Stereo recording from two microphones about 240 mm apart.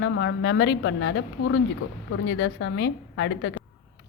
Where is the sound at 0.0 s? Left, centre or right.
Left.